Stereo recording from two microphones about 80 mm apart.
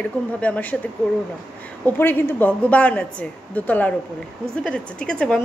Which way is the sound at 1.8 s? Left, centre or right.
Left.